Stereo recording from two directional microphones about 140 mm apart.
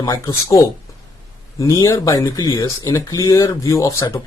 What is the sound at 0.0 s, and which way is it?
Speech, 25° left (ahead or behind).